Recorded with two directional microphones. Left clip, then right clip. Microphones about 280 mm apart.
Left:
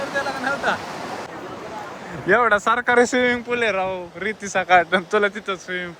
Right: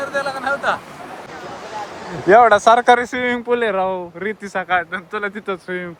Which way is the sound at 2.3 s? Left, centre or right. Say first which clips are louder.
Right 7 dB; centre.